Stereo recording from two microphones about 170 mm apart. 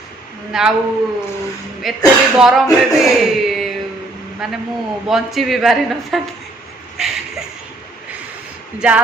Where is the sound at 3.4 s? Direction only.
Centre (ahead or behind).